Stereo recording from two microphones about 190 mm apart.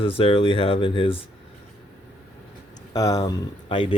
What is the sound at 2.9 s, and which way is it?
Speech, 20° left (ahead or behind).